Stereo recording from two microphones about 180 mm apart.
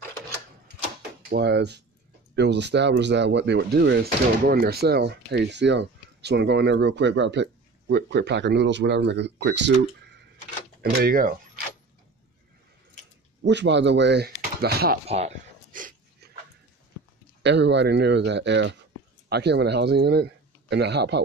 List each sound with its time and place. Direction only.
1.3 s speech: 70° right (ahead or behind)
10.8 s speech: 60° right (ahead or behind)
13.4 s speech: 75° right (ahead or behind)
14.6 s speech: 60° right (ahead or behind)
15.0 s speech: 35° right (ahead or behind)
15.7 s dog: 50° right (ahead or behind)
17.4 s speech: 75° right (ahead or behind)
19.2 s speech: 65° right (ahead or behind)